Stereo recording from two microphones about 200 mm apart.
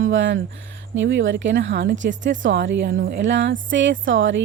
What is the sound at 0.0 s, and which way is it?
Speech, 65° right (ahead or behind).